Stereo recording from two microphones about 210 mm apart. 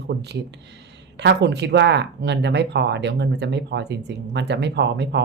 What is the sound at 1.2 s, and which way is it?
Speech, 55° right (ahead or behind).